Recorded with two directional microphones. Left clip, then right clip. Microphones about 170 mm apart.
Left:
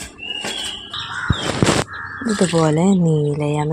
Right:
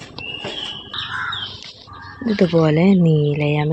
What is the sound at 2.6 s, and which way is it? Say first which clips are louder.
Speech: right 1 dB; 5° right (ahead or behind).